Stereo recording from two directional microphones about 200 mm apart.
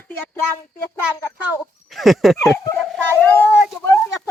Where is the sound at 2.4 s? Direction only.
15° left (ahead or behind).